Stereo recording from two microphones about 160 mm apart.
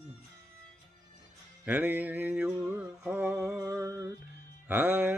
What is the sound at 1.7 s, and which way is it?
Mantra, 10° right (ahead or behind).